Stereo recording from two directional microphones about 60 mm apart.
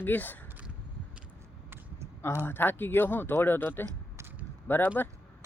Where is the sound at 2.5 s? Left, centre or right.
Left.